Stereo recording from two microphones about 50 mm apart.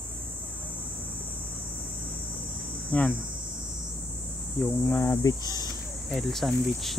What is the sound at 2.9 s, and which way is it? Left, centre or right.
Speech, left.